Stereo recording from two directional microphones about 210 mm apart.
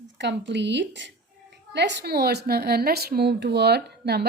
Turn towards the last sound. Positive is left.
turn(degrees=-50)  # may be behind; listen again after turning